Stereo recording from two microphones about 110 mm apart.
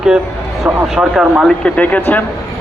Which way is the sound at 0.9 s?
5° right (ahead or behind).